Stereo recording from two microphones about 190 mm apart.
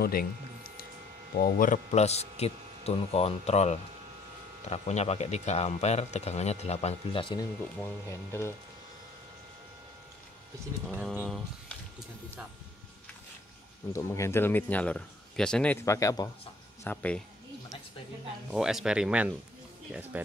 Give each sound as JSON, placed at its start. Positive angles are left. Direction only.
{"t": 0.0, "sound": "a sound", "side_deg": 50}
{"t": 1.3, "sound": "speech", "side_deg": 50}
{"t": 7.8, "sound": "a man's voice", "side_deg": 15}
{"t": 10.9, "sound": "speech", "side_deg": -5}
{"t": 13.9, "sound": "a man's voice", "side_deg": 15}
{"t": 18.5, "sound": "speech", "side_deg": 0}